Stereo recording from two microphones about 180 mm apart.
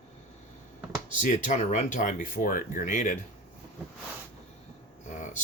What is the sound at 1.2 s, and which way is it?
Speech, 40° left (ahead or behind).